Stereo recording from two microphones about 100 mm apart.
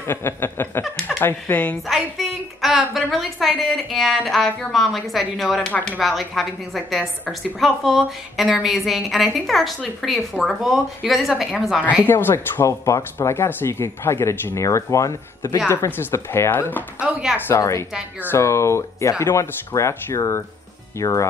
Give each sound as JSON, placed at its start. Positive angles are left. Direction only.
{"t": 0.0, "sound": "speech", "side_deg": 25}
{"t": 1.9, "sound": "a woman's voice", "side_deg": 0}
{"t": 12.1, "sound": "speech", "side_deg": 20}
{"t": 17.0, "sound": "speech", "side_deg": -10}
{"t": 17.5, "sound": "speech", "side_deg": 30}